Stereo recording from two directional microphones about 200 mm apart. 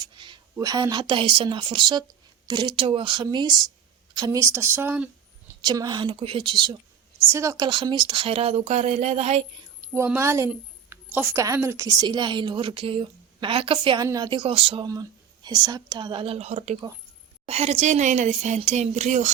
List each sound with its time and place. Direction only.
0.0 s a woman's voice: 25° right (ahead or behind)
9.9 s a woman's voice: 15° right (ahead or behind); by 19.3 s 35° right (ahead or behind)